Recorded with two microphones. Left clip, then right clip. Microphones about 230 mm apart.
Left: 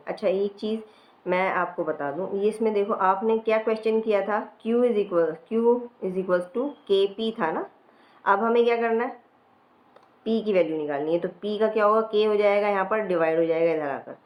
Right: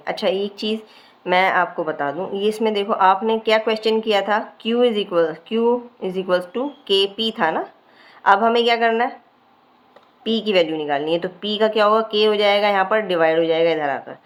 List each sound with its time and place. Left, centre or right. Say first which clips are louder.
0.0 s a woman's voice: right 4 dB; right
10.2 s speech: right 5 dB; right